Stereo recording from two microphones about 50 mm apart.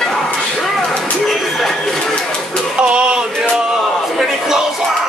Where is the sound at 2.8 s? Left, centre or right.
Right.